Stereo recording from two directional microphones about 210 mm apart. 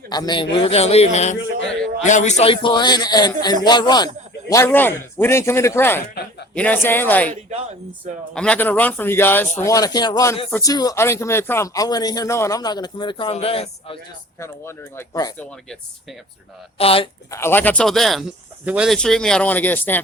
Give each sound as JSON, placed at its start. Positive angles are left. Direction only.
{"t": 0.1, "sound": "a man's voice", "side_deg": 20}
{"t": 8.4, "sound": "speech", "side_deg": 5}
{"t": 14.3, "sound": "speech", "side_deg": 10}
{"t": 16.7, "sound": "a man's voice", "side_deg": 25}
{"t": 17.3, "sound": "speech", "side_deg": 10}